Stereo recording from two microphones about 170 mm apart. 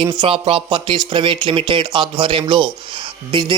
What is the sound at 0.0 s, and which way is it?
A man's voice, 30° right (ahead or behind).